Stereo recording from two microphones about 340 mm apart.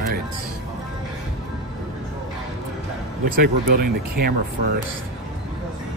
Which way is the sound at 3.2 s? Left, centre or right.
Right.